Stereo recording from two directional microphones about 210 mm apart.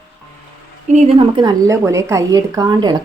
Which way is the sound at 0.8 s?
35° right (ahead or behind).